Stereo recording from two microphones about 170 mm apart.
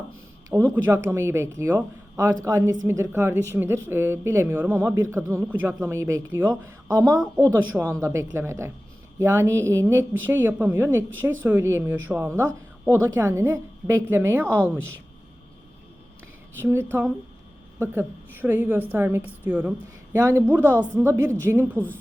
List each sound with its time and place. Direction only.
0.5 s a woman's voice: 20° right (ahead or behind)
14.4 s a woman's voice: 10° left (ahead or behind)
16.6 s a woman's voice: 10° right (ahead or behind)